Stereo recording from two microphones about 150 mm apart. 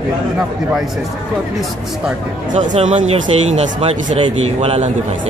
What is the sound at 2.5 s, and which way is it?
Speech, 50° right (ahead or behind).